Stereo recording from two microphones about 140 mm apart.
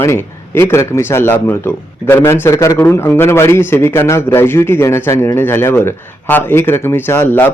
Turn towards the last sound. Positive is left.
turn(degrees=15)  # may be behind; listen again after turning